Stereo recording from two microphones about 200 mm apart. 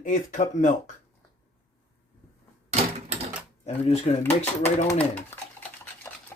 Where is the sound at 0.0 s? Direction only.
40° left (ahead or behind).